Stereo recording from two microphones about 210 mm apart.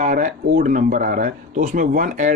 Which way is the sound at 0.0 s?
35° right (ahead or behind).